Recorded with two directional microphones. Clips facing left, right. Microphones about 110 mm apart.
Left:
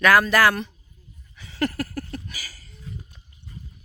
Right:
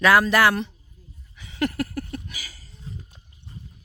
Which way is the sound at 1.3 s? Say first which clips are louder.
Right 1 dB; 15° right (ahead or behind).